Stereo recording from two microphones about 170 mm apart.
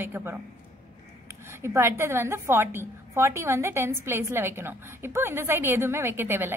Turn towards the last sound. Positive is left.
turn(degrees=-15)  # may be behind; listen again after turning